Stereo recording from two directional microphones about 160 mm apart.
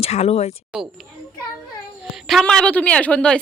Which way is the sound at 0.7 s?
5° right (ahead or behind).